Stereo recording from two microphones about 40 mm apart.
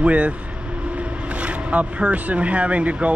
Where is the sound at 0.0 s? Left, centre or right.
Right.